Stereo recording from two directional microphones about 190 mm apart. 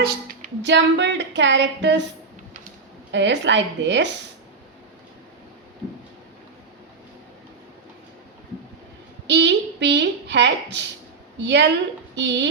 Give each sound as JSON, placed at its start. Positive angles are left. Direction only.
{"t": 0.0, "sound": "speech", "side_deg": -60}
{"t": 3.1, "sound": "speech", "side_deg": -70}
{"t": 9.2, "sound": "a woman's voice", "side_deg": -65}